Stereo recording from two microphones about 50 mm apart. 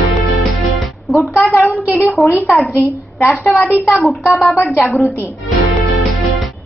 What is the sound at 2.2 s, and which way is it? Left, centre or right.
Speech, centre.